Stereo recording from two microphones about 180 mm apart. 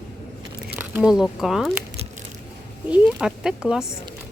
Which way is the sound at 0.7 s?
10° right (ahead or behind).